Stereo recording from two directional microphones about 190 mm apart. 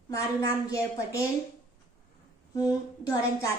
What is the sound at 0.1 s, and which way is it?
A woman's voice, 15° left (ahead or behind).